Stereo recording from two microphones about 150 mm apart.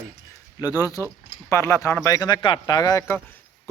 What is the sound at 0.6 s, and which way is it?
Speech, 25° left (ahead or behind).